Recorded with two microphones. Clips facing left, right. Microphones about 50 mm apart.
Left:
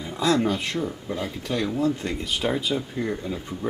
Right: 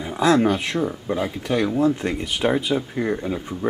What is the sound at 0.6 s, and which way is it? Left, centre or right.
Speech, centre.